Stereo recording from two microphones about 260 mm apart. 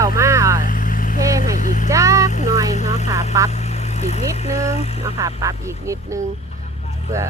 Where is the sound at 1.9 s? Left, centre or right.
Centre.